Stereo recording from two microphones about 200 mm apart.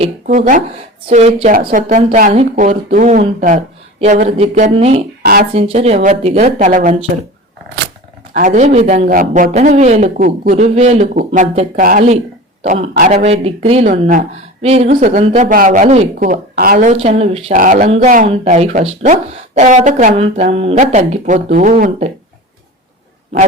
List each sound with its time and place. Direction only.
0.0 s speech: 40° right (ahead or behind)
1.7 s a woman's voice: 40° right (ahead or behind)
5.2 s speech: 50° right (ahead or behind)
5.5 s speech: 30° right (ahead or behind)
8.3 s a woman's voice: 35° right (ahead or behind)
13.2 s speech: 30° right (ahead or behind)
17.5 s speech: 40° right (ahead or behind)